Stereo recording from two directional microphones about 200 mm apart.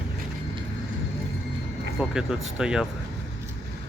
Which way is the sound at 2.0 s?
5° right (ahead or behind).